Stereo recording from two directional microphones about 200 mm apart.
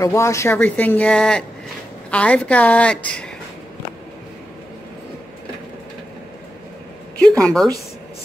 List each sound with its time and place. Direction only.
0.0 s speech: 15° left (ahead or behind)
7.2 s a woman's voice: 5° left (ahead or behind)